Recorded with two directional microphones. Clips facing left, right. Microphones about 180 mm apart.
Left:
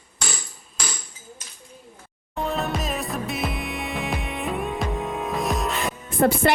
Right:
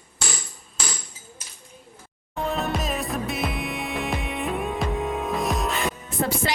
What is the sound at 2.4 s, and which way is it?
Music, centre (ahead or behind).